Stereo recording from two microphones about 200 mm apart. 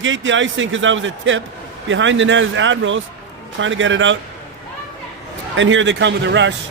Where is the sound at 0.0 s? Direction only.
70° right (ahead or behind).